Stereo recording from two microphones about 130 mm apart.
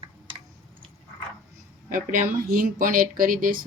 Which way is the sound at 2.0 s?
90° right.